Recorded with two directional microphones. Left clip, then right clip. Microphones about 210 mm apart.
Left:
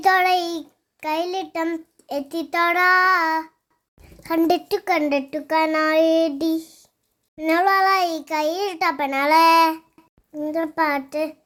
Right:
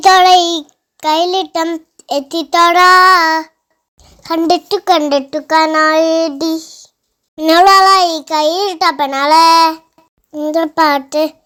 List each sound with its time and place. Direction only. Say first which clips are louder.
0.0 s a child's voice: right 11 dB; 25° right (ahead or behind)
3.9 s a woman's voice: right 5 dB; 15° right (ahead or behind)
4.9 s a child's voice: right 10 dB; 20° right (ahead or behind)
7.3 s a child's voice: right 11 dB; 25° right (ahead or behind)
10.3 s a child's voice: right 10 dB; 25° right (ahead or behind)